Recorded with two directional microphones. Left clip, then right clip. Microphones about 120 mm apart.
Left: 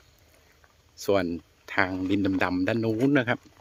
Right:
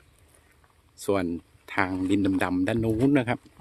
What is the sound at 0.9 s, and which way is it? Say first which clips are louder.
Speech: left 2 dB; 5° right (ahead or behind).